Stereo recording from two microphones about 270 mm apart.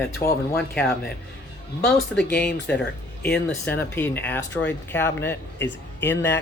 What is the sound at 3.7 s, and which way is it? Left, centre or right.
Speech, centre.